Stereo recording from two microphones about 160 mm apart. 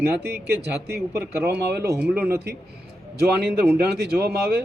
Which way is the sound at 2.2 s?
75° right (ahead or behind).